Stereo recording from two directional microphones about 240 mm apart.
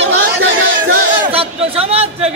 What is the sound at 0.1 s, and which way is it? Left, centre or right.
Music, right.